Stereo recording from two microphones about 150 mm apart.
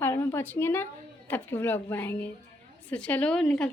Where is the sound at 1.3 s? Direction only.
15° left (ahead or behind).